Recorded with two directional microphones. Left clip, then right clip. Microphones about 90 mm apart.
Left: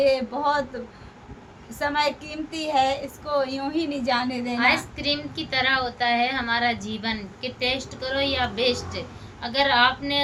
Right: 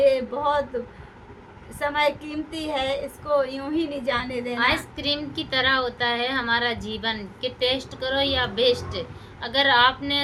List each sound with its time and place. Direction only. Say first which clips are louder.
0.0 s a woman's voice: right 1 dB; 15° left (ahead or behind)
1.8 s a woman's voice: right 1 dB; 20° left (ahead or behind)
4.5 s a woman's voice: left 1 dB; 45° right (ahead or behind)